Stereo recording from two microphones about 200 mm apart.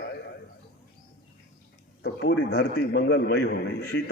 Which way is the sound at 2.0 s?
55° left (ahead or behind).